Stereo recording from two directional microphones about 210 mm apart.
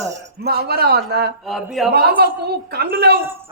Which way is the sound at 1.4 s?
Centre (ahead or behind).